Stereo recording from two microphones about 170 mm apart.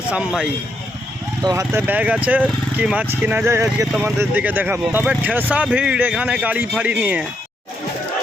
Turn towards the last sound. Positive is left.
turn(degrees=-10)  # may be behind; listen again after turning